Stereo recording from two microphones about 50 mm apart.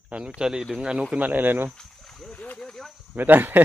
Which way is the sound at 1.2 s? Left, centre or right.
Right.